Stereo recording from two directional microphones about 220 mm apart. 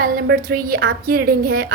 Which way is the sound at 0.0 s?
40° right (ahead or behind).